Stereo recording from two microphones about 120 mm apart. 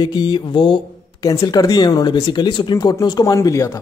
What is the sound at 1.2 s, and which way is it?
Speech, 25° left (ahead or behind).